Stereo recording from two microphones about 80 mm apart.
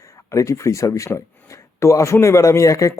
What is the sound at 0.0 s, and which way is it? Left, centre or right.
Speech, left.